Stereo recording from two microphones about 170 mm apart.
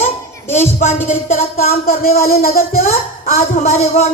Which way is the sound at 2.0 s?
60° left (ahead or behind).